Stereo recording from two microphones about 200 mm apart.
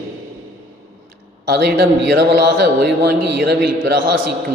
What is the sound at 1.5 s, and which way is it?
A man's voice, 50° right (ahead or behind).